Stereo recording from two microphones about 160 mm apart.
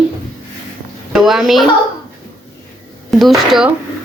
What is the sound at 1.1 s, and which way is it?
Speech, centre (ahead or behind).